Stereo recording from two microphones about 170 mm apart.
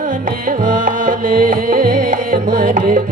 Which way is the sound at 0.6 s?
55° right (ahead or behind).